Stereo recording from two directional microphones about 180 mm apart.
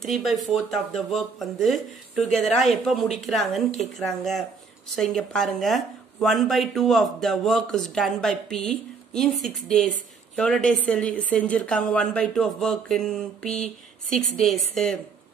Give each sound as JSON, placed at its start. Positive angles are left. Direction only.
{"t": 0.0, "sound": "speech", "side_deg": 0}